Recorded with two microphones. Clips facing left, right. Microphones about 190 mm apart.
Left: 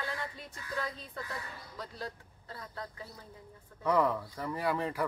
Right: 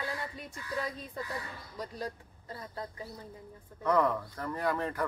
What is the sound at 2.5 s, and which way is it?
Speech, 25° right (ahead or behind).